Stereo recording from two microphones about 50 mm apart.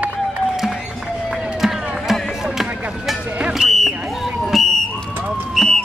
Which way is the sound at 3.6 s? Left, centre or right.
Centre.